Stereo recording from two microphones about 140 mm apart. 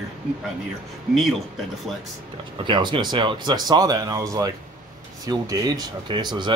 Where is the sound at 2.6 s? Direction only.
35° right (ahead or behind).